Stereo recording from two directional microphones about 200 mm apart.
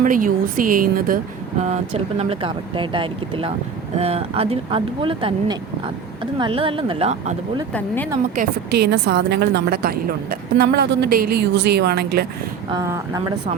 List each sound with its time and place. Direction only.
0.0 s speech: 45° right (ahead or behind)
1.6 s speech: 35° right (ahead or behind)
7.7 s speech: 10° left (ahead or behind)
8.4 s a woman's voice: 55° right (ahead or behind)
12.7 s speech: 15° right (ahead or behind)